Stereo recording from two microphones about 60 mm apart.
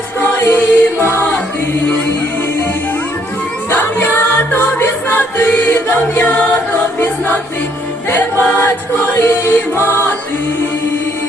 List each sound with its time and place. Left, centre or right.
0.3 s music: left
3.7 s music: left
8.1 s choir: left
9.7 s music: left